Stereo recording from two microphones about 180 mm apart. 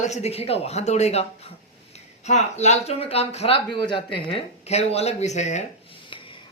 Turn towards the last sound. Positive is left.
turn(degrees=40)  # may be behind; listen again after turning